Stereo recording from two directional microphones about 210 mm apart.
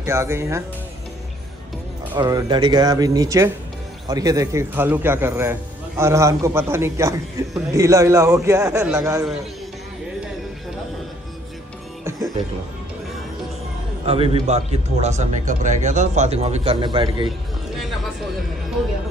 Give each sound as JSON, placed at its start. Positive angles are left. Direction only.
{"t": 0.0, "sound": "a man's voice", "side_deg": -15}
{"t": 2.1, "sound": "a man's voice", "side_deg": -20}
{"t": 14.0, "sound": "a man's voice", "side_deg": -25}